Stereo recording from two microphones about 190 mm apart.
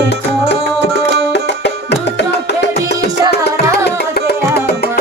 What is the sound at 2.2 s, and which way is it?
Music, 60° left (ahead or behind).